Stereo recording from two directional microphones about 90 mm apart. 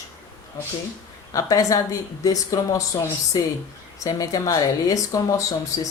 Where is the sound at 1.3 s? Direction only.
40° left (ahead or behind).